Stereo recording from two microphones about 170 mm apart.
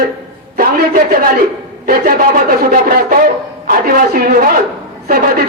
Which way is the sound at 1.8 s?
60° right (ahead or behind).